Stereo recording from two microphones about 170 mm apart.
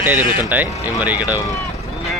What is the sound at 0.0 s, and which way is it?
Speech, 10° right (ahead or behind).